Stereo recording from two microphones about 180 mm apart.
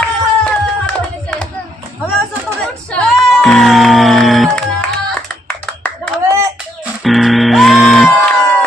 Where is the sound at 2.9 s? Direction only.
Centre (ahead or behind).